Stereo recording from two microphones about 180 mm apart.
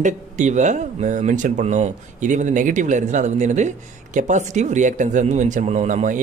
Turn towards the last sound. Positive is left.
turn(degrees=-45)  # may be behind; listen again after turning